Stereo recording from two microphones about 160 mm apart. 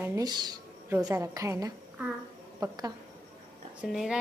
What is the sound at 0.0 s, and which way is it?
A woman's voice, 20° right (ahead or behind).